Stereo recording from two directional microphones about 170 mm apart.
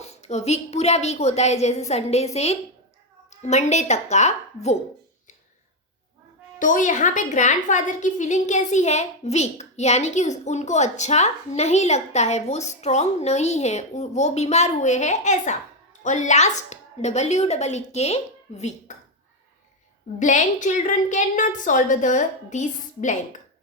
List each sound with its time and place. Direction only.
0.0 s a woman's voice: 40° left (ahead or behind)
6.6 s a woman's voice: 50° left (ahead or behind)
20.1 s a woman's voice: 45° left (ahead or behind)